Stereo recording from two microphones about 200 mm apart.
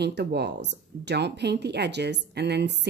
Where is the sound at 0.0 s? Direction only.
55° right (ahead or behind).